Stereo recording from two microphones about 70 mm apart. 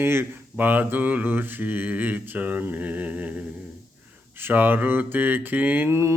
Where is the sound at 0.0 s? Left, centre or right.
Right.